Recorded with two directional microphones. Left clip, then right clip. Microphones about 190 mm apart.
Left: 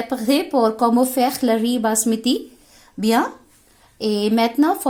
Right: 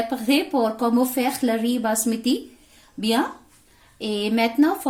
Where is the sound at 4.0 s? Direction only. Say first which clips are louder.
Left 4 dB; 35° left (ahead or behind).